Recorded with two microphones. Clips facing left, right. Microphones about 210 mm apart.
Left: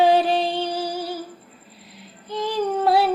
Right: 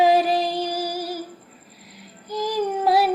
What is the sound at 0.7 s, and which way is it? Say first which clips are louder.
Music: even; 10° right (ahead or behind).